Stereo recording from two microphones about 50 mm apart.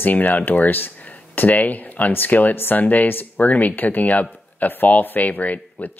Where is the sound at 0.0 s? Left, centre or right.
Left.